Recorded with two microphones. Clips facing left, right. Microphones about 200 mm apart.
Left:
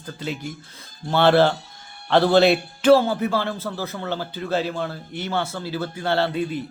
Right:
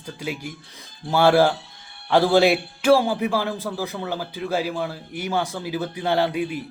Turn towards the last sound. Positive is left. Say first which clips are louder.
# even
turn(degrees=-15)  # may be behind; listen again after turning